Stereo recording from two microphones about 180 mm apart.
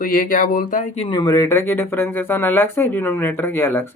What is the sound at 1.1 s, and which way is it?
Speech, 20° left (ahead or behind).